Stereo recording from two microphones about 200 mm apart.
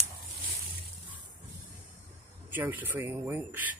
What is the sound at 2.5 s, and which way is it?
Speech, 10° right (ahead or behind).